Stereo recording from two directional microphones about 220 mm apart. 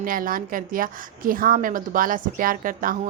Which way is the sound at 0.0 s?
40° right (ahead or behind).